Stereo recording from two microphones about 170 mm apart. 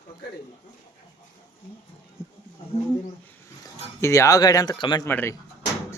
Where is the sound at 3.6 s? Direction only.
15° left (ahead or behind).